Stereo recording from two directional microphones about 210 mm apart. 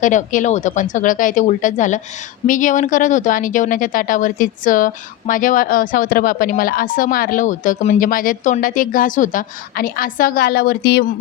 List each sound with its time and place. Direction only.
0.0 s speech: 35° left (ahead or behind)